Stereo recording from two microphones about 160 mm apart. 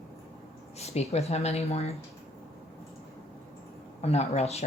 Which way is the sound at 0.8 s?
40° left (ahead or behind).